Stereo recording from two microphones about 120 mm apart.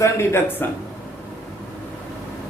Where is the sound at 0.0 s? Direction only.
20° left (ahead or behind).